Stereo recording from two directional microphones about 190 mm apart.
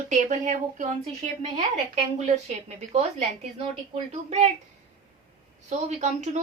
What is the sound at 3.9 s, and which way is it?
Speech, 30° right (ahead or behind).